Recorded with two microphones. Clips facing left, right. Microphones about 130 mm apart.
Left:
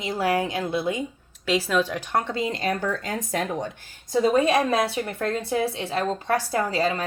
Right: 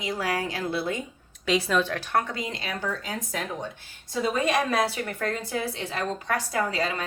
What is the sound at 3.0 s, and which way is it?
Speech, 60° left (ahead or behind).